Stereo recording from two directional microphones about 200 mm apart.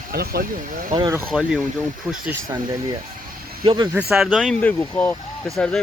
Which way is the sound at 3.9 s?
5° right (ahead or behind).